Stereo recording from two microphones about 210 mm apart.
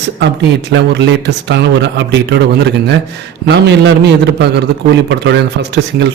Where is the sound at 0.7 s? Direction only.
55° right (ahead or behind).